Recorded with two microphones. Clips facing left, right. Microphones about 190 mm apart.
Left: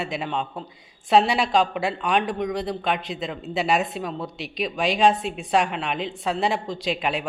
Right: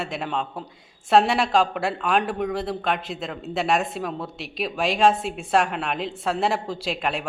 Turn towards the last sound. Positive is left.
turn(degrees=0)  # may be behind; listen again after turning